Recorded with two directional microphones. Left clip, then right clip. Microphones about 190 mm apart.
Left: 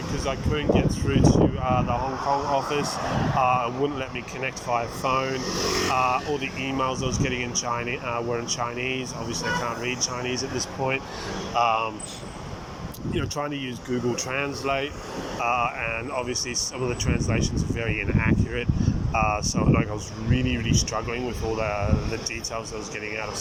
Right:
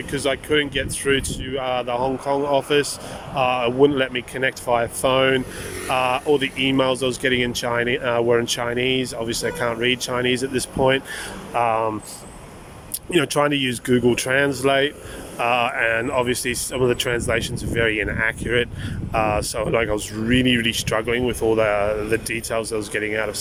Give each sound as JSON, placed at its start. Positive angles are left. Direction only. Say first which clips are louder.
{"t": 0.1, "sound": "speech", "louder": "right 8 dB", "side_deg": -55}
{"t": 11.5, "sound": "speech", "louder": "right 3 dB", "side_deg": -35}
{"t": 13.1, "sound": "speech", "louder": "right 11 dB", "side_deg": -55}